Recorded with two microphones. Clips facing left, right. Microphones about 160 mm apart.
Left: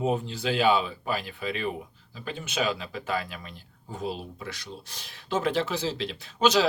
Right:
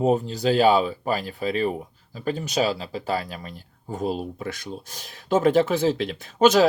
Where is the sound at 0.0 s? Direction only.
40° right (ahead or behind).